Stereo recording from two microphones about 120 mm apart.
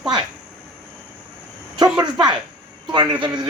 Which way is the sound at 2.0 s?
40° right (ahead or behind).